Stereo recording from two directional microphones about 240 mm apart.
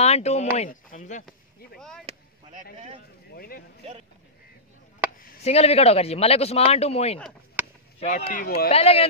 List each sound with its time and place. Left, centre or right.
0.0 s speech: left
1.8 s speech: centre
2.5 s a man's voice: right
3.3 s speech: left
5.2 s a sound: left
5.5 s speech: left
8.6 s speech: left